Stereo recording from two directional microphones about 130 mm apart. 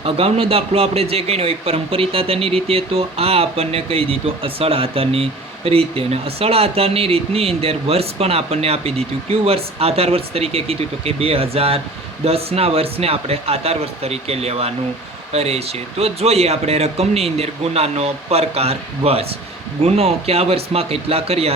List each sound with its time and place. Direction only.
0.0 s speech: 50° right (ahead or behind)